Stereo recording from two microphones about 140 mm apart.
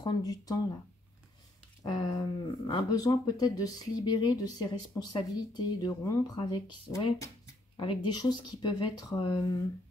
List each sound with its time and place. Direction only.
0.0 s speech: 30° left (ahead or behind)
1.8 s speech: 30° left (ahead or behind)